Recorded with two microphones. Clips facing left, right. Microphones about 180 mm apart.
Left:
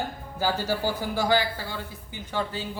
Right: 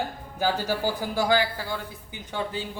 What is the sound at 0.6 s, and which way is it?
Speech, 15° right (ahead or behind).